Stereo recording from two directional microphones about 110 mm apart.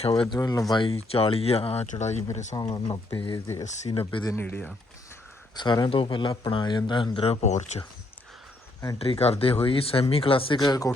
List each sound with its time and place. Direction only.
0.3 s speech: 30° left (ahead or behind)
0.7 s speech: 45° left (ahead or behind)
0.9 s speech: 65° left (ahead or behind); by 2.6 s 90° left
2.6 s speech: 35° left (ahead or behind)
3.4 s speech: 30° left (ahead or behind)
4.0 s speech: 40° left (ahead or behind)
4.4 s speech: 20° left (ahead or behind)
5.5 s speech: 40° left (ahead or behind)
7.4 s speech: 90° left
9.0 s speech: 65° left (ahead or behind)
10.6 s speech: 35° left (ahead or behind)